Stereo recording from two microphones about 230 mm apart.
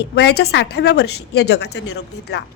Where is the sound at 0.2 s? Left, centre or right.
Left.